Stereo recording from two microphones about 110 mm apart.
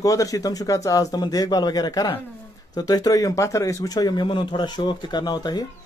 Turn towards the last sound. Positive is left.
turn(degrees=40)  # may be behind; listen again after turning